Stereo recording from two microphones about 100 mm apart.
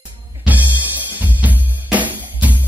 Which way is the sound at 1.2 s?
15° right (ahead or behind).